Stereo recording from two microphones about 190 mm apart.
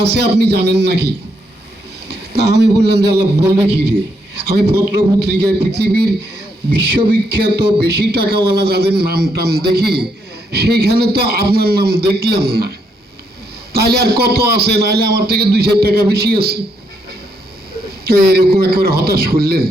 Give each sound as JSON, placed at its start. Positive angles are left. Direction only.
{"t": 0.0, "sound": "a man's voice", "side_deg": -60}
{"t": 5.2, "sound": "a man's voice", "side_deg": -60}
{"t": 13.7, "sound": "a man's voice", "side_deg": -55}
{"t": 18.0, "sound": "a man's voice", "side_deg": -55}